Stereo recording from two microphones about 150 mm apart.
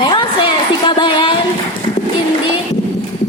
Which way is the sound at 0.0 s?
35° left (ahead or behind).